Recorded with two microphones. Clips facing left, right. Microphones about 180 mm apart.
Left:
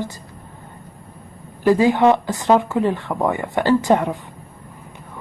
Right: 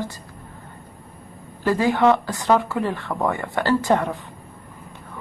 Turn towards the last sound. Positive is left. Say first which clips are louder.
# left 3 dB
turn(degrees=15)  # may be behind; listen again after turning